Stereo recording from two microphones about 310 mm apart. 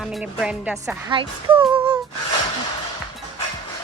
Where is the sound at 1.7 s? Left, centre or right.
Centre.